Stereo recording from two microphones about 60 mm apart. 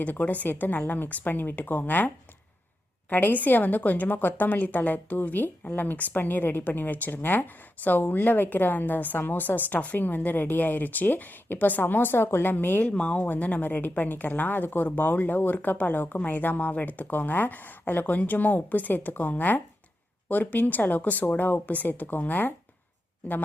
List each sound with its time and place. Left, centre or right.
0.0 s a woman's voice: left
12.9 s a woman's voice: centre